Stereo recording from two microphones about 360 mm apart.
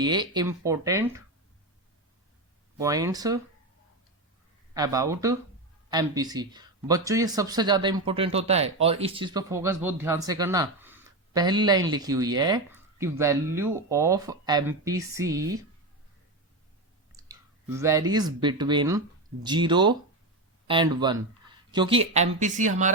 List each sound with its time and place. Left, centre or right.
0.0 s speech: centre
2.7 s speech: centre
4.7 s speech: centre
17.2 s clicking: centre
17.7 s speech: centre